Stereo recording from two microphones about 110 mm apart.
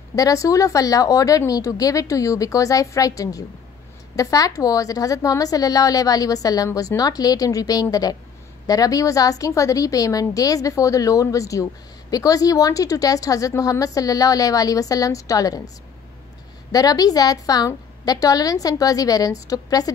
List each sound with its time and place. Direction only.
0.1 s a woman's voice: 30° left (ahead or behind)
16.7 s a woman's voice: 35° left (ahead or behind)